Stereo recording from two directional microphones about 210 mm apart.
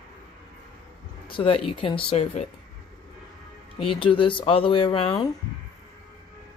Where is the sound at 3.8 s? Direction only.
25° left (ahead or behind).